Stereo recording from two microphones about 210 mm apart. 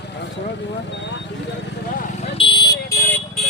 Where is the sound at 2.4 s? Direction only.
20° left (ahead or behind).